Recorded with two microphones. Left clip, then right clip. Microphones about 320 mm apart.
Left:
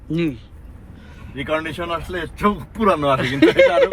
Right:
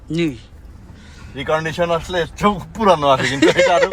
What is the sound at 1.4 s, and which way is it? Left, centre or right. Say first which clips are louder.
A man's voice: right 4 dB; right.